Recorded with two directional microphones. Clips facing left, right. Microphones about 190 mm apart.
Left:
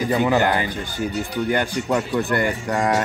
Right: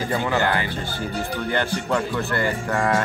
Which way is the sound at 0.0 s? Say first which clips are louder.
Left 4 dB; 15° left (ahead or behind).